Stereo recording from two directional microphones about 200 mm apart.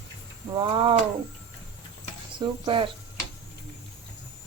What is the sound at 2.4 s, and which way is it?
Speech, 25° right (ahead or behind).